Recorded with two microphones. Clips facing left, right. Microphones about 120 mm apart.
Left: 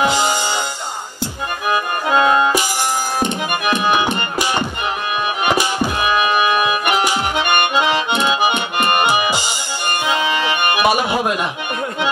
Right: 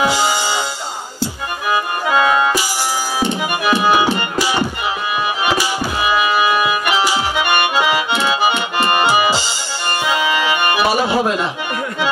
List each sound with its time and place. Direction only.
0.0 s music: 20° left (ahead or behind)
2.0 s music: 20° left (ahead or behind)
3.7 s music: 10° right (ahead or behind)
5.5 s music: 20° left (ahead or behind)
6.9 s accordion: 55° left (ahead or behind)
7.3 s accordion: 20° left (ahead or behind)
9.0 s music: 15° left (ahead or behind)